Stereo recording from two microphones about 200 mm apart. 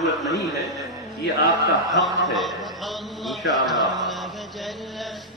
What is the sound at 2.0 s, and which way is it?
Speech, centre (ahead or behind).